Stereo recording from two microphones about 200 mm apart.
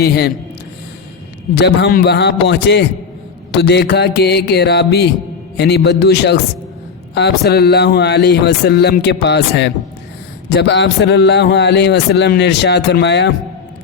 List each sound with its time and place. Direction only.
0.0 s a man's voice: 55° left (ahead or behind)
1.5 s a man's voice: 55° left (ahead or behind)